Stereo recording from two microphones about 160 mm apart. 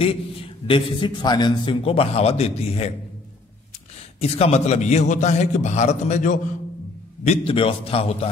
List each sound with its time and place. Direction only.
0.7 s a man's voice: 30° left (ahead or behind)
4.2 s a man's voice: 40° left (ahead or behind)
7.2 s a man's voice: 35° left (ahead or behind)